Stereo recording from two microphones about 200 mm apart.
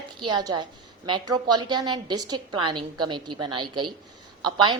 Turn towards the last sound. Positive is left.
turn(degrees=-25)  # may be behind; listen again after turning